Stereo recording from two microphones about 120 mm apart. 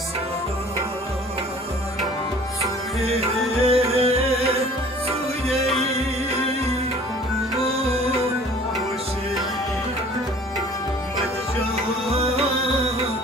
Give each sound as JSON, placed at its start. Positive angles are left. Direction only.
{"t": 3.6, "sound": "music", "side_deg": -55}
{"t": 7.7, "sound": "music", "side_deg": -55}
{"t": 12.1, "sound": "music", "side_deg": -55}